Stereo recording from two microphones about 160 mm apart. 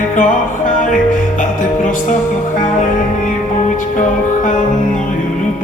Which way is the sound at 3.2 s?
50° left (ahead or behind).